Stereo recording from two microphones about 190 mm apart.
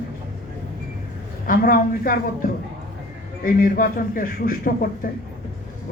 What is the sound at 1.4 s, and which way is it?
Speech, 50° left (ahead or behind).